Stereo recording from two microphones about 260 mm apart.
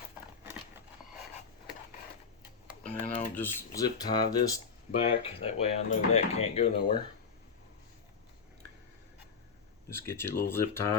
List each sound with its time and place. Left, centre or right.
2.6 s a sound: centre
3.3 s speech: centre
9.9 s speech: centre